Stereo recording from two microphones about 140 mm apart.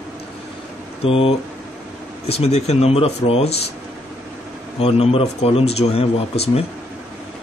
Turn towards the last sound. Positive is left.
turn(degrees=45)  # may be behind; listen again after turning